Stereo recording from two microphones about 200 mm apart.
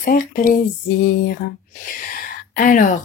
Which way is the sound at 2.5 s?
40° left (ahead or behind).